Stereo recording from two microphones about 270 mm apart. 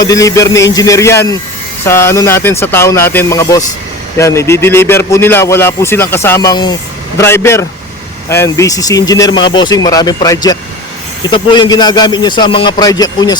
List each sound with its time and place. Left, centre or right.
0.0 s a man's voice: centre